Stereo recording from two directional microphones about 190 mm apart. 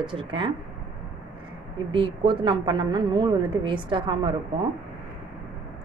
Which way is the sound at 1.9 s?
25° right (ahead or behind).